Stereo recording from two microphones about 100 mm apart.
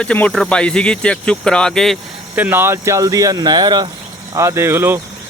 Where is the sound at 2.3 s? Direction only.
20° right (ahead or behind); by 3.8 s 45° right (ahead or behind).